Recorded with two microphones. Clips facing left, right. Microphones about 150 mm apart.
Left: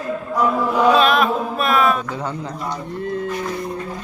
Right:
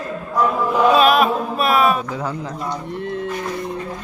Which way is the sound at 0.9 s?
10° right (ahead or behind).